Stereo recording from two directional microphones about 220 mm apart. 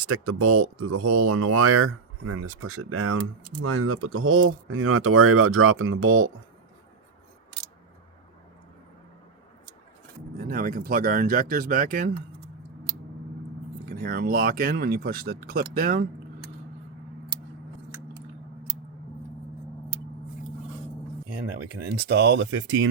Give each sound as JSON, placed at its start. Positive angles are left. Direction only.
{"t": 0.1, "sound": "speech", "side_deg": -80}
{"t": 10.5, "sound": "speech", "side_deg": -40}
{"t": 14.0, "sound": "speech", "side_deg": -40}
{"t": 21.8, "sound": "speech", "side_deg": -50}